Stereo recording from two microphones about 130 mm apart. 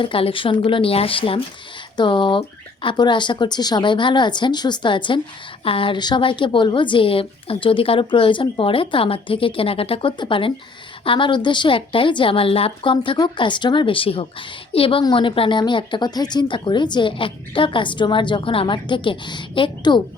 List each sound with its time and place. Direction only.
0.0 s a woman's voice: 45° left (ahead or behind)